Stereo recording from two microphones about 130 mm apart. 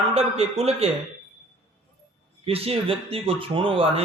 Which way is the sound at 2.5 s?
50° right (ahead or behind).